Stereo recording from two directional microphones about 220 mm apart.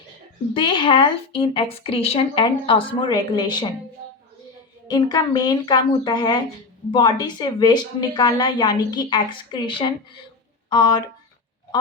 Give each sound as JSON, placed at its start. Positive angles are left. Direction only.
{"t": 0.5, "sound": "a woman's voice", "side_deg": 20}
{"t": 4.9, "sound": "a woman's voice", "side_deg": 20}